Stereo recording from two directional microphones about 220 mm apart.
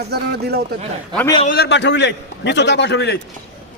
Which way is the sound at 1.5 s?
45° left (ahead or behind).